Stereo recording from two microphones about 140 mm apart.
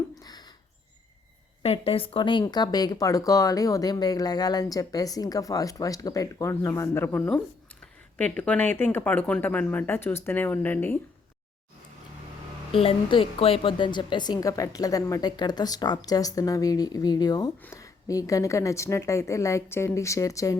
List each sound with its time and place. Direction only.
0.1 s rodents: 30° left (ahead or behind)
1.6 s speech: 45° left (ahead or behind); by 10.9 s 15° left (ahead or behind)
12.7 s speech: 40° left (ahead or behind)
17.6 s speech: 20° left (ahead or behind)